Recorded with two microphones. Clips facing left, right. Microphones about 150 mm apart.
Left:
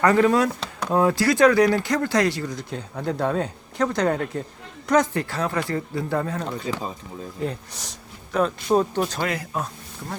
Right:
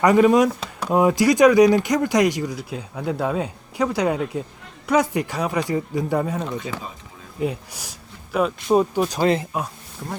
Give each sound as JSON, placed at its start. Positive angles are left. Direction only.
{"t": 0.0, "sound": "speech", "side_deg": -15}
{"t": 9.2, "sound": "speech", "side_deg": -25}